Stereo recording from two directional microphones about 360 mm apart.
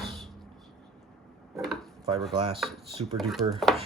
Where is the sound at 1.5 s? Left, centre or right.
Centre.